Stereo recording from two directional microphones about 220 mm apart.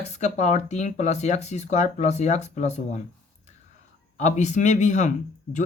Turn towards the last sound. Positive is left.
turn(degrees=35)  # may be behind; listen again after turning